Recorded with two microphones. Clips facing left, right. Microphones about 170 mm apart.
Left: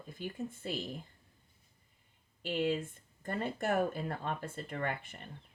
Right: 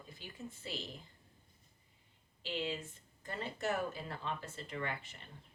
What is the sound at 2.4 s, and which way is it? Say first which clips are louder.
Speech: left 7 dB; 50° left (ahead or behind).